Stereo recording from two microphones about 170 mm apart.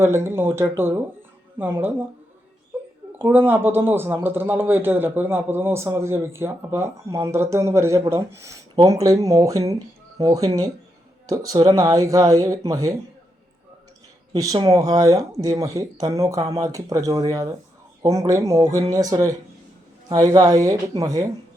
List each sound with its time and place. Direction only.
0.0 s a man's voice: 15° right (ahead or behind)
3.2 s a man's voice: 10° right (ahead or behind)
14.3 s speech: 20° right (ahead or behind)